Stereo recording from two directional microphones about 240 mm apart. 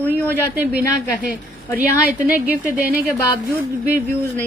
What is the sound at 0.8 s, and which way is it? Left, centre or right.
Speech, right.